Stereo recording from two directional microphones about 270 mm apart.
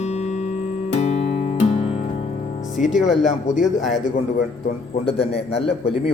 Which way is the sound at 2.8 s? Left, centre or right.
Centre.